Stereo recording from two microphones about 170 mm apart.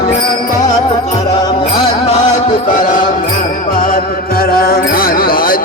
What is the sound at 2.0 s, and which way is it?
Music, 50° left (ahead or behind).